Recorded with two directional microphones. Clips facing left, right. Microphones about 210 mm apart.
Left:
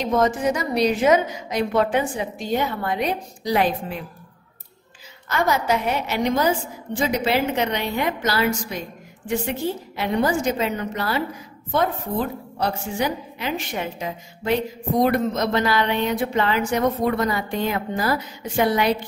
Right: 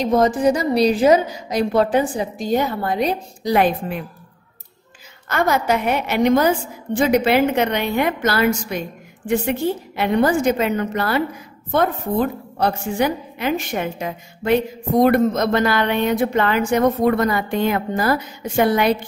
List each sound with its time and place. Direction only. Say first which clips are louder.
0.0 s a woman's voice: right 4 dB; 35° right (ahead or behind)
3.4 s a woman's voice: right 4 dB; 55° right (ahead or behind)
5.3 s a woman's voice: right 3 dB; 55° right (ahead or behind)